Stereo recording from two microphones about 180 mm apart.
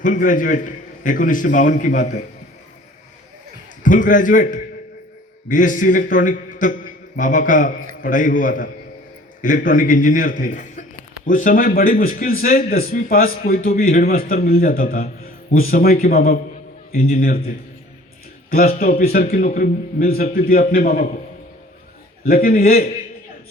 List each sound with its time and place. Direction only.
0.0 s a man's voice: 45° left (ahead or behind)
3.8 s a man's voice: 45° left (ahead or behind)
15.2 s music: 55° left (ahead or behind)
16.0 s a man's voice: 55° left (ahead or behind)
18.5 s a man's voice: 55° left (ahead or behind)
22.3 s a man's voice: 55° left (ahead or behind)